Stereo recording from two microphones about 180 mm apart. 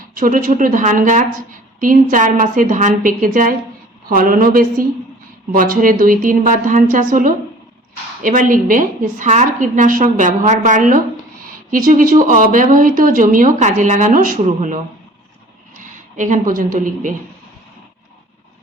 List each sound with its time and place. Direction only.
0.1 s a woman's voice: 50° right (ahead or behind)